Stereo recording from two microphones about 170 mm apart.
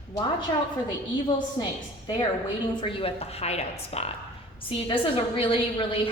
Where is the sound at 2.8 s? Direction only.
30° left (ahead or behind).